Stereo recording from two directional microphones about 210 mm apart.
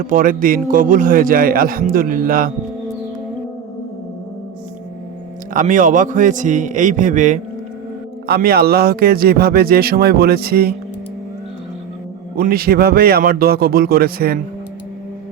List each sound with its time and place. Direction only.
0.0 s a man's voice: 40° right (ahead or behind)
5.5 s a man's voice: 40° right (ahead or behind)
12.4 s speech: 45° right (ahead or behind)